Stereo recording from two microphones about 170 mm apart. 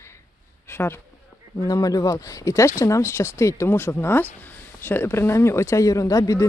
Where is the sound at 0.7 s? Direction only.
15° left (ahead or behind).